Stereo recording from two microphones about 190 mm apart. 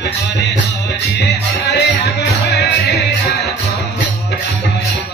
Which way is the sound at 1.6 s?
60° left (ahead or behind).